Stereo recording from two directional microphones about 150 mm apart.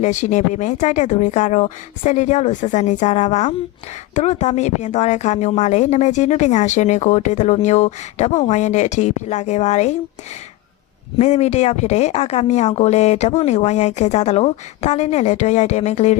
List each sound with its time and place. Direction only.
0.0 s a woman's voice: 55° left (ahead or behind)
11.2 s a woman's voice: 50° left (ahead or behind)